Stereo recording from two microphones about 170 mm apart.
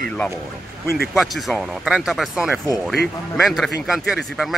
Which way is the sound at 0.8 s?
65° left (ahead or behind).